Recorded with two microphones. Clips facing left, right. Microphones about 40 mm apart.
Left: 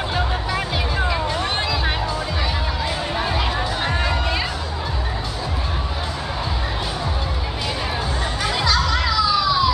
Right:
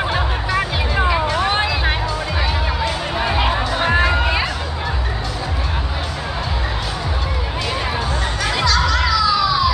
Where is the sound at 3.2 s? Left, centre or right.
Right.